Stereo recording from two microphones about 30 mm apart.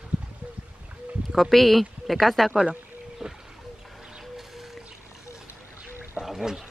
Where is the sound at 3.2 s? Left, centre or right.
Centre.